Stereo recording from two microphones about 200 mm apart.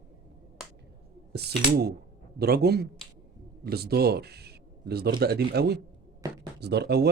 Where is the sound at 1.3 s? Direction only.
55° right (ahead or behind).